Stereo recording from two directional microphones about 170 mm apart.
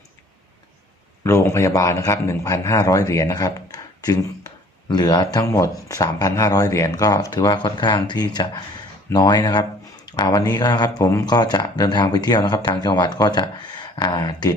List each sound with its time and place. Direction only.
1.2 s speech: 15° left (ahead or behind)